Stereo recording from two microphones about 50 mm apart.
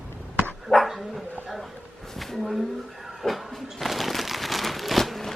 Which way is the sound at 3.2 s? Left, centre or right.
Centre.